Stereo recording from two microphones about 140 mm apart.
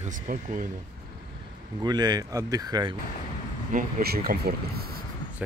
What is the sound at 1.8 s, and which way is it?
Speech, 30° right (ahead or behind).